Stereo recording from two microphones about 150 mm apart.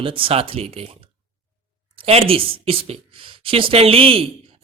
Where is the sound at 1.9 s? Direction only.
40° right (ahead or behind).